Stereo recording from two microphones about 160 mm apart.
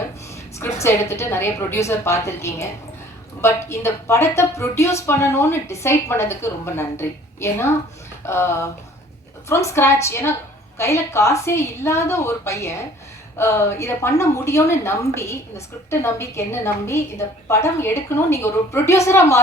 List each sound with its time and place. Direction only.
0.6 s a woman's voice: 15° left (ahead or behind)